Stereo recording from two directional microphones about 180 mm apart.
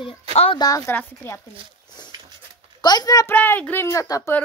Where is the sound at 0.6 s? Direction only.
20° left (ahead or behind).